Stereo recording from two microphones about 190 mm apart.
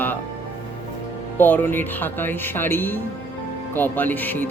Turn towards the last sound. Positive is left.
turn(degrees=10)  # may be behind; listen again after turning